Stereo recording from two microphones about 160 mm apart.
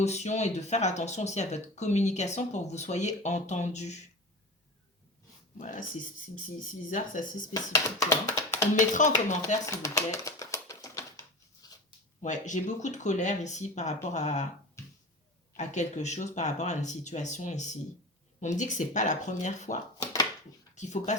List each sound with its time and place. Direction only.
0.0 s speech: 45° left (ahead or behind)
5.5 s speech: 55° left (ahead or behind)
6.9 s speech: 55° left (ahead or behind)
7.5 s speech: 25° left (ahead or behind)
8.8 s speech: 50° left (ahead or behind)
9.6 s a sound: 20° left (ahead or behind)
11.6 s zipper: 25° left (ahead or behind)
12.2 s speech: 50° left (ahead or behind)
15.5 s speech: 45° left (ahead or behind)